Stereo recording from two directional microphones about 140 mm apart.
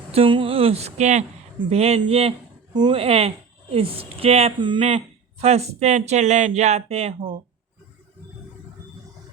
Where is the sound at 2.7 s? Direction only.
35° right (ahead or behind).